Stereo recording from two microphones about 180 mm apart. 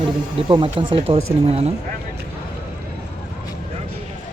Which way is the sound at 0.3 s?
30° right (ahead or behind).